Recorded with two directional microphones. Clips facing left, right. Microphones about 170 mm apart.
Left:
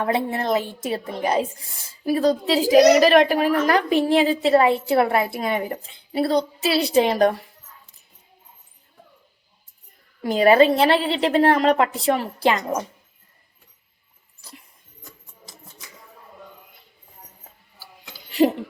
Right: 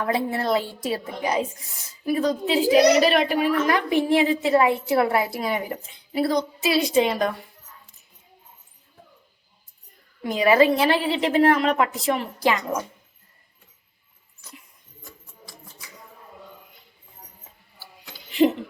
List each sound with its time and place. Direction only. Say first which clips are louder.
0.0 s a woman's voice: left 1 dB; 25° left (ahead or behind)
10.5 s a woman's voice: left 2 dB; 30° left (ahead or behind)